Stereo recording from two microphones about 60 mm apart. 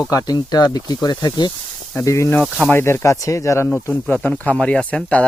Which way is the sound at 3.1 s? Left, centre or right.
Left.